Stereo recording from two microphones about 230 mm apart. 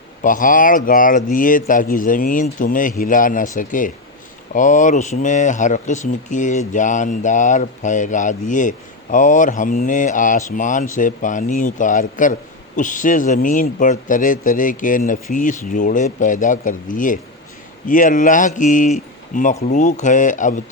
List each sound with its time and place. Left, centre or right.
0.2 s speech: left